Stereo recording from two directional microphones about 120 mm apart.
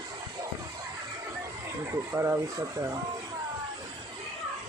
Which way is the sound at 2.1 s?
20° right (ahead or behind).